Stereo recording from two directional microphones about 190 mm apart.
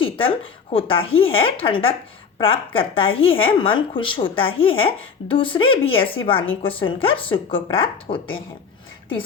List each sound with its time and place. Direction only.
0.0 s speech: 30° left (ahead or behind)